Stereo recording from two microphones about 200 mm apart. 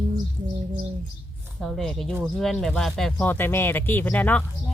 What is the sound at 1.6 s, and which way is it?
Speech, centre (ahead or behind).